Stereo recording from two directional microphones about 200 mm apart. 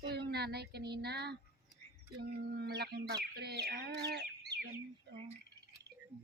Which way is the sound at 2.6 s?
55° right (ahead or behind).